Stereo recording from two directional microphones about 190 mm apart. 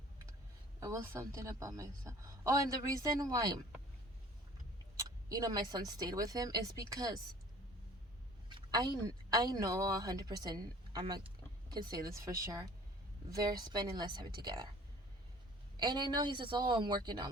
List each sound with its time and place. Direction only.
0.8 s a woman's voice: 15° right (ahead or behind)
5.0 s speech: 20° right (ahead or behind)
8.4 s a woman's voice: 25° right (ahead or behind)
15.8 s speech: 20° right (ahead or behind)